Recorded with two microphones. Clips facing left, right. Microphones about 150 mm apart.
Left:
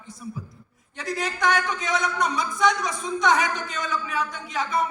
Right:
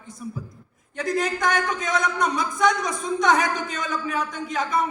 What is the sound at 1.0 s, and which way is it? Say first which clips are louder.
A man's voice: right 3 dB; 50° right (ahead or behind).